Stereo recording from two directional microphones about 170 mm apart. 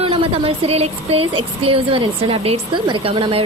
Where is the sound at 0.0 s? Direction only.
35° right (ahead or behind).